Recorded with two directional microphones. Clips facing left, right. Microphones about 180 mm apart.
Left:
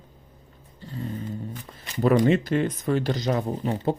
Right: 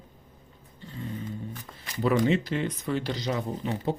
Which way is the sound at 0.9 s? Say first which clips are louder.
Left 4 dB; 40° left (ahead or behind).